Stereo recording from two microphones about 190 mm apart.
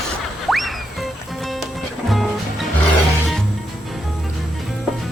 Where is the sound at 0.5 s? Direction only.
Centre (ahead or behind).